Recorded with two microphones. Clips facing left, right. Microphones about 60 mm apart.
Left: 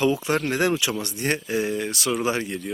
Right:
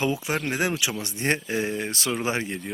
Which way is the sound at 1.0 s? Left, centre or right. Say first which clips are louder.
Even; right.